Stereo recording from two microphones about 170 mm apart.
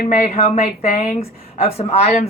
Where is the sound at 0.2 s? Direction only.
40° left (ahead or behind).